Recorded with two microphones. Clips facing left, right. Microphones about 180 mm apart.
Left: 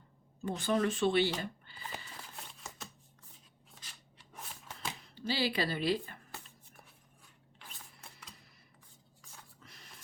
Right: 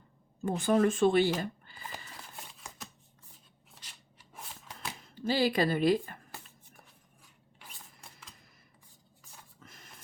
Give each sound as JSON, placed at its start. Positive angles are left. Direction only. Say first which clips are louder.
{"t": 0.4, "sound": "speech", "louder": "right 5 dB", "side_deg": -50}
{"t": 4.4, "sound": "shuffling cards", "louder": "right 1 dB", "side_deg": 0}
{"t": 5.0, "sound": "a woman's voice", "louder": "right 6 dB", "side_deg": -45}
{"t": 9.6, "sound": "printer", "louder": "right 3 dB", "side_deg": -50}